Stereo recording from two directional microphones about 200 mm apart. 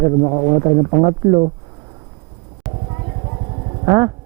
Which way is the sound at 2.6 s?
Centre (ahead or behind).